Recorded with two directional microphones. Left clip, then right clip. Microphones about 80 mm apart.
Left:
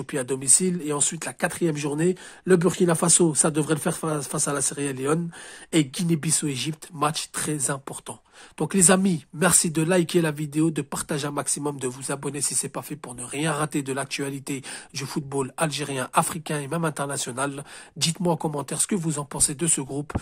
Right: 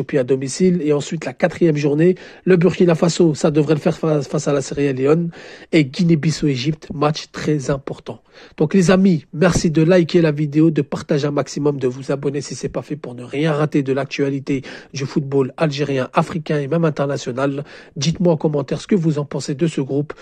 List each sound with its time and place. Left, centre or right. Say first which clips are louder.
0.0 s speech: right 10 dB; right
11.8 s speech: right 10 dB; right
12.4 s speech: right 6 dB; right
15.1 s speech: right 9 dB; right
16.2 s speech: right 2 dB; right
16.8 s speech: right 8 dB; right